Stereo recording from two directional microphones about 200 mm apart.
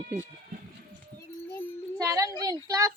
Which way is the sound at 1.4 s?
10° left (ahead or behind).